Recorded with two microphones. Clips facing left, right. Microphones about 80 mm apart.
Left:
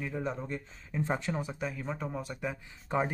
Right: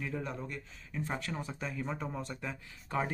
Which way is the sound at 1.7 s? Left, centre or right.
Centre.